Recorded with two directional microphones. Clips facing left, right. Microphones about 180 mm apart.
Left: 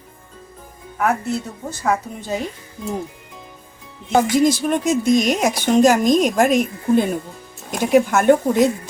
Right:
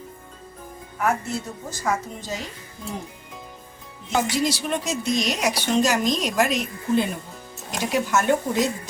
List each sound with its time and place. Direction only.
1.0 s a woman's voice: 60° left (ahead or behind)
4.1 s a woman's voice: 50° left (ahead or behind)